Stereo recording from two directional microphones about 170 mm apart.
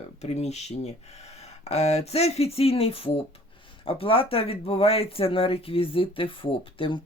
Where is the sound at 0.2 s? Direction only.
40° left (ahead or behind).